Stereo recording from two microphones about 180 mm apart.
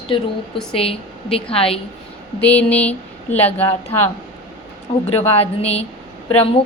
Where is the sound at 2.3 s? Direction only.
10° left (ahead or behind).